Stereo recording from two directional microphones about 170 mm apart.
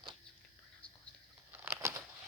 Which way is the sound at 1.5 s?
15° right (ahead or behind).